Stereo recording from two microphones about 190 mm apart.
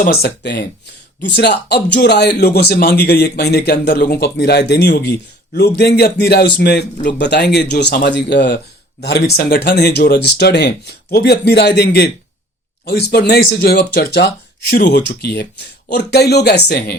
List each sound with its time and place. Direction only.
0.0 s speech: 55° left (ahead or behind)